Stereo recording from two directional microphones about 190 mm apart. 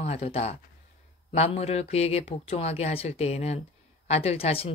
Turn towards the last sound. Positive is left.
turn(degrees=30)  # may be behind; listen again after turning